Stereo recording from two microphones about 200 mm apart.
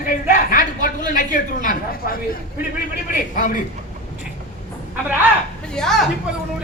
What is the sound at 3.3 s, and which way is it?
Speech, 45° left (ahead or behind).